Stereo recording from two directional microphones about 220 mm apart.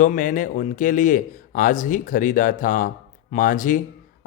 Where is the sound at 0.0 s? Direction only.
35° left (ahead or behind).